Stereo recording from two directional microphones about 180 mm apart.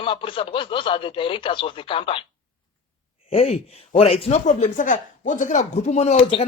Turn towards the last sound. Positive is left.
turn(degrees=35)  # may be behind; listen again after turning